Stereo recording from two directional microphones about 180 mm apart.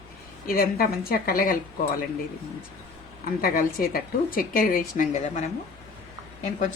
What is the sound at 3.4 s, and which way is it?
A woman's voice, 55° left (ahead or behind).